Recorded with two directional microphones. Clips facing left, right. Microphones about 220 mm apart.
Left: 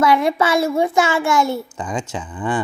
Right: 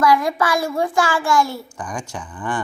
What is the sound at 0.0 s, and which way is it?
A child's voice, 25° left (ahead or behind).